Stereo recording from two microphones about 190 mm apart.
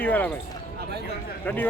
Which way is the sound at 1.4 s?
10° left (ahead or behind).